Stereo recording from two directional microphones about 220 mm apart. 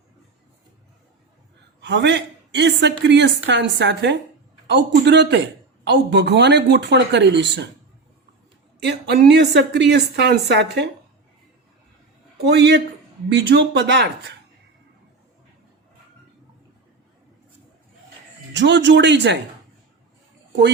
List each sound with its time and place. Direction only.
1.8 s a man's voice: 55° right (ahead or behind)
8.8 s a man's voice: 50° right (ahead or behind)
12.4 s a man's voice: 50° right (ahead or behind)
18.5 s a man's voice: 55° right (ahead or behind)